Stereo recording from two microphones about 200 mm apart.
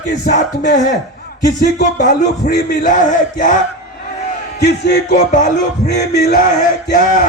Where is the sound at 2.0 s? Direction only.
40° left (ahead or behind).